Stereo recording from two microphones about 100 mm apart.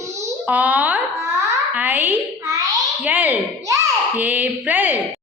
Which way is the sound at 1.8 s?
20° right (ahead or behind).